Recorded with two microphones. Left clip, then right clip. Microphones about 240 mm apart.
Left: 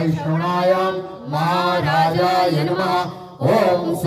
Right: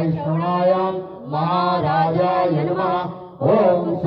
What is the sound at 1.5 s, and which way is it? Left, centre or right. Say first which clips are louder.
Music: even; left.